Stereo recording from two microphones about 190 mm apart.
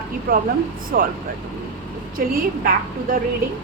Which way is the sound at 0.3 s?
45° right (ahead or behind).